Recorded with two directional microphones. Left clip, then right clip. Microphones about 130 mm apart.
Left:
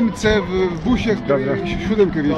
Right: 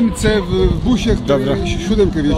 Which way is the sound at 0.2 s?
30° right (ahead or behind).